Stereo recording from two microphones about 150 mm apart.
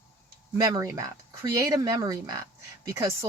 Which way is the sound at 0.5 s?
25° right (ahead or behind).